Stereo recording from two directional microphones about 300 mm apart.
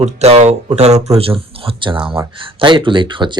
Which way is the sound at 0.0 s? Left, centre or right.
Right.